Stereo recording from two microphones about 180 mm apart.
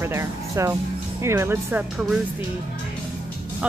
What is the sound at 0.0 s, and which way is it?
Speech, 15° right (ahead or behind).